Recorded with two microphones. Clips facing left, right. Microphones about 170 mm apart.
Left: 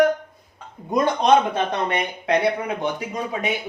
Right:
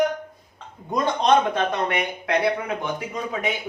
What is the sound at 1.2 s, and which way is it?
Speech, 25° left (ahead or behind).